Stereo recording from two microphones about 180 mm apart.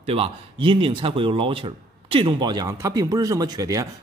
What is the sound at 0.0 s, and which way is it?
Speech, 30° right (ahead or behind).